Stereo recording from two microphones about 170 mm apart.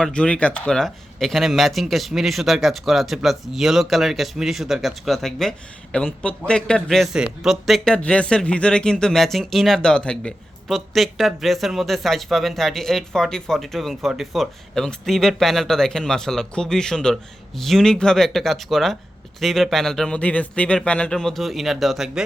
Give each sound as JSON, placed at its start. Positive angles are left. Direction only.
{"t": 0.0, "sound": "speech", "side_deg": 5}